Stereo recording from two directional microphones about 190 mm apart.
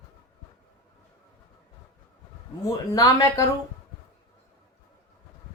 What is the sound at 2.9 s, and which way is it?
Speech, 20° left (ahead or behind).